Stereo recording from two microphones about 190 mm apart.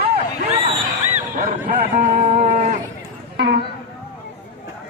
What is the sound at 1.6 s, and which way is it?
Speech, 40° right (ahead or behind).